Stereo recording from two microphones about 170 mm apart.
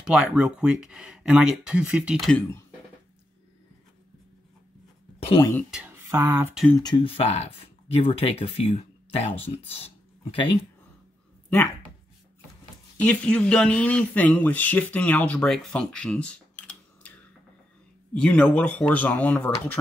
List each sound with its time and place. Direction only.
0.0 s speech: 5° right (ahead or behind)
5.2 s speech: 25° left (ahead or behind)
5.7 s speech: 10° right (ahead or behind)
6.7 s speech: 25° left (ahead or behind)
9.7 s a sound: 35° left (ahead or behind)
13.0 s speech: 5° left (ahead or behind)
18.2 s speech: 5° left (ahead or behind)